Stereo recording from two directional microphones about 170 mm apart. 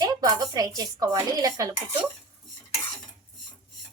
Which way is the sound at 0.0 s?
20° right (ahead or behind).